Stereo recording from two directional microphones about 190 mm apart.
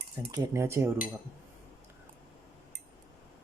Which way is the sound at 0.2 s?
15° right (ahead or behind).